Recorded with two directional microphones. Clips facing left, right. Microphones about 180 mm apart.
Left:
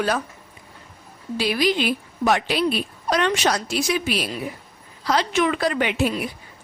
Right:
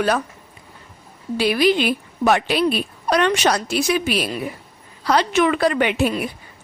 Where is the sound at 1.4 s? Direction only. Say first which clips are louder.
Right 4 dB; 60° right (ahead or behind).